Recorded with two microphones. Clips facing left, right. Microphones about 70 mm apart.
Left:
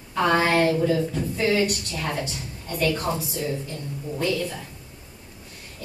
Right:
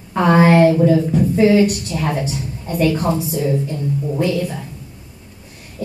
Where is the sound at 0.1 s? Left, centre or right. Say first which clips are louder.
Right 8 dB; right.